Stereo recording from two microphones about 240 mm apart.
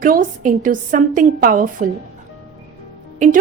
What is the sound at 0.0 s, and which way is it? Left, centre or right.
A woman's voice, right.